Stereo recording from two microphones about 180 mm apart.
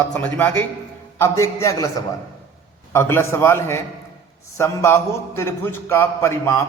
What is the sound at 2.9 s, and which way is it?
A man's voice, 15° left (ahead or behind).